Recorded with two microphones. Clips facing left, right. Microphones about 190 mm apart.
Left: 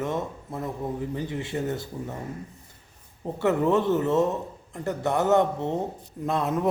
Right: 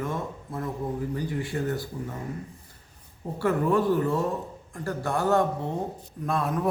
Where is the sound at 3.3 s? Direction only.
25° left (ahead or behind).